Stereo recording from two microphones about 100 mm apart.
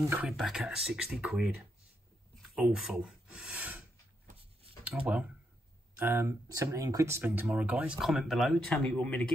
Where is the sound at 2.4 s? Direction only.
5° right (ahead or behind).